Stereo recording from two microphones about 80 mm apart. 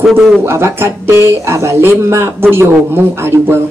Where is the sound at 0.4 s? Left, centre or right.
Right.